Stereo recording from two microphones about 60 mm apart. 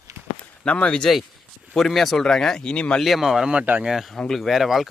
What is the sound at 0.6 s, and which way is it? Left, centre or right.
Speech, centre.